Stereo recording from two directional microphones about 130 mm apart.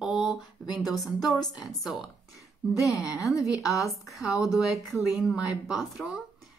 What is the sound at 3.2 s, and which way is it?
Speech, 25° left (ahead or behind).